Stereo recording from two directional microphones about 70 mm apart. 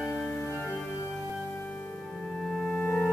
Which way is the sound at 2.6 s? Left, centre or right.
Centre.